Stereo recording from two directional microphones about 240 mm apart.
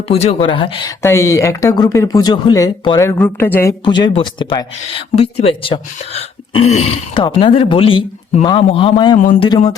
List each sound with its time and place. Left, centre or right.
0.1 s speech: left
9.1 s speech: left